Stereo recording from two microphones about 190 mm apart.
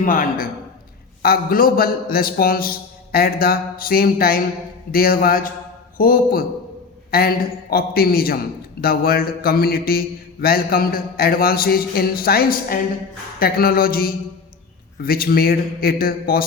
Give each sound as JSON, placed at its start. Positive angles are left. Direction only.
{"t": 0.0, "sound": "a man's voice", "side_deg": 45}